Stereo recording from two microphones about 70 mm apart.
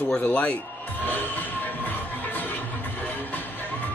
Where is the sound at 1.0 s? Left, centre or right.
Left.